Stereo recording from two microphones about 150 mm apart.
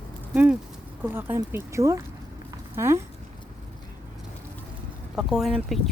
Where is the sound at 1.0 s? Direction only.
15° right (ahead or behind).